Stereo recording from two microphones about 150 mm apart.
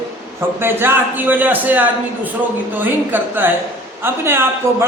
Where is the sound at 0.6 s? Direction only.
15° right (ahead or behind).